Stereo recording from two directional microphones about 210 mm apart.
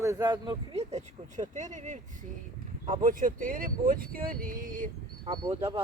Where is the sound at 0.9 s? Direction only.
35° right (ahead or behind).